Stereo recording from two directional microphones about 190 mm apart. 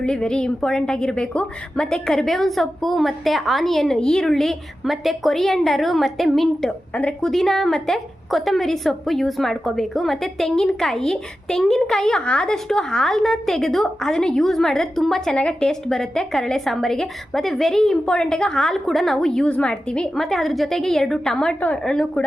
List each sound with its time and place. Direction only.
0.0 s a woman's voice: 5° left (ahead or behind)